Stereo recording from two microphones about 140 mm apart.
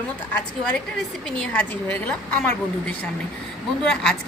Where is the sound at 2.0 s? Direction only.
10° left (ahead or behind).